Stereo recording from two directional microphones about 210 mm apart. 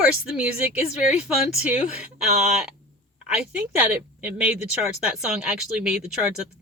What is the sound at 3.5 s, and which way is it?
Speech, 10° right (ahead or behind).